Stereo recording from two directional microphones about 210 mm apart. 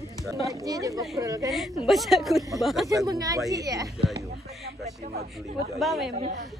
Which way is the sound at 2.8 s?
15° right (ahead or behind).